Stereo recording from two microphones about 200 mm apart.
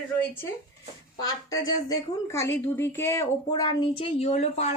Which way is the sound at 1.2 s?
20° left (ahead or behind).